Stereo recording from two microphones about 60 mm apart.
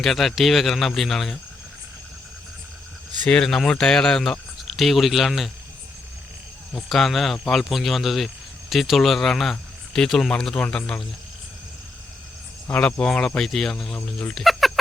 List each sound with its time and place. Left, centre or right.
0.0 s speech: centre
3.2 s cricket: centre
3.7 s speech: centre
6.7 s speech: centre
10.5 s cricket: centre
12.7 s cricket: centre
14.3 s a sound: centre